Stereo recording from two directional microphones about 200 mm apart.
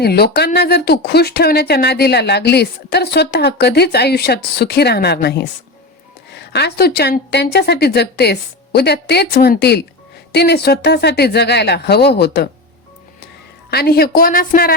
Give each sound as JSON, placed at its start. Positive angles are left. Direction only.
{"t": 0.0, "sound": "a woman's voice", "side_deg": 50}
{"t": 13.7, "sound": "speech", "side_deg": 50}